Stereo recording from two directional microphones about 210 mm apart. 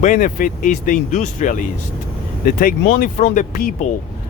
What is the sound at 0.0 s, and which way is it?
Speech, 40° left (ahead or behind).